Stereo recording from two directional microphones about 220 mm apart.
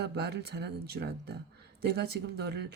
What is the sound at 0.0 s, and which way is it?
Speech, 50° right (ahead or behind).